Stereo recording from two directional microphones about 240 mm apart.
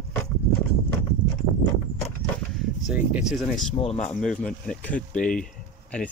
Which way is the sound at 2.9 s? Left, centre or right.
Centre.